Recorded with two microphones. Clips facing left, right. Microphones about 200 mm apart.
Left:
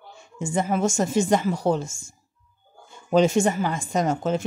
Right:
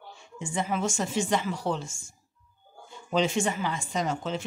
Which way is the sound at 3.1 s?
45° left (ahead or behind).